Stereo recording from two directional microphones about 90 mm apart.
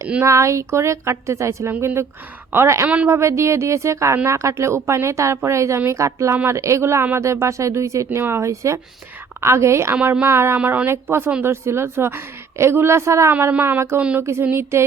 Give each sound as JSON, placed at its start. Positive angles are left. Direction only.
{"t": 0.2, "sound": "a woman's voice", "side_deg": -35}
{"t": 2.8, "sound": "speech", "side_deg": -15}
{"t": 3.1, "sound": "speech", "side_deg": -30}
{"t": 9.9, "sound": "speech", "side_deg": -15}
{"t": 10.2, "sound": "a woman's voice", "side_deg": -30}
{"t": 10.6, "sound": "speech", "side_deg": -15}
{"t": 10.8, "sound": "a woman's voice", "side_deg": -25}
{"t": 13.5, "sound": "a woman's voice", "side_deg": -20}